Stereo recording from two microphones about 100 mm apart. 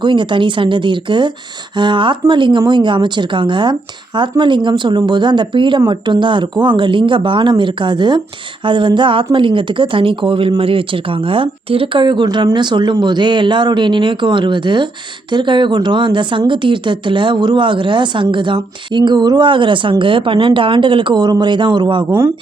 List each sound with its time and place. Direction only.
0.0 s speech: 50° right (ahead or behind)